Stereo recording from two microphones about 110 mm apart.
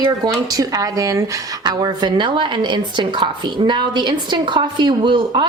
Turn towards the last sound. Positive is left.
turn(degrees=-45)  # may be behind; listen again after turning